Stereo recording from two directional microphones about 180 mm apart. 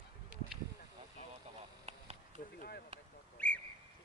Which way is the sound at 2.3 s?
55° left (ahead or behind).